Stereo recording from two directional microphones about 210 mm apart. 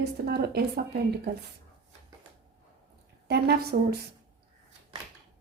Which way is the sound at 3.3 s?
50° right (ahead or behind).